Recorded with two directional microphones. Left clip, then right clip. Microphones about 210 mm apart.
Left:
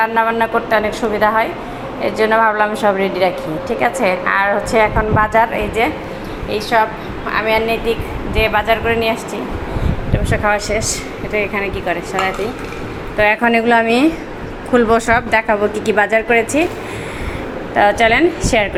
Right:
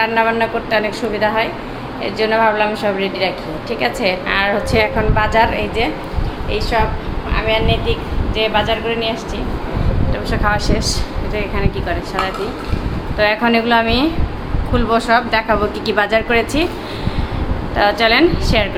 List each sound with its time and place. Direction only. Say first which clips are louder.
0.0 s a woman's voice: even; 10° left (ahead or behind)
3.8 s a woman's voice: left 2 dB; 5° left (ahead or behind)
10.2 s a woman's voice: left 2 dB; 10° left (ahead or behind)
15.9 s a woman's voice: left 1 dB; 10° left (ahead or behind)
17.7 s a woman's voice: left 1 dB; 15° left (ahead or behind)